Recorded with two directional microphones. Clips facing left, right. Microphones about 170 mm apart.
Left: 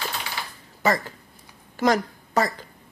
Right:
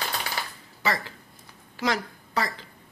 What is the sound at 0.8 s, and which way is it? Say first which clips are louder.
A woman's voice: left 5 dB; 45° left (ahead or behind).